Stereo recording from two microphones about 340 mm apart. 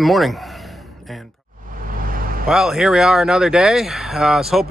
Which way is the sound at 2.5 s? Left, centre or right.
Centre.